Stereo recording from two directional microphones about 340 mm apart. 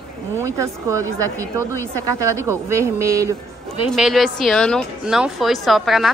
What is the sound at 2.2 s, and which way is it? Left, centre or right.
Speech, centre.